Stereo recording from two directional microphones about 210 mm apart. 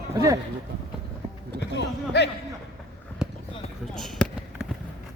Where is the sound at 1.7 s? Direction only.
55° left (ahead or behind).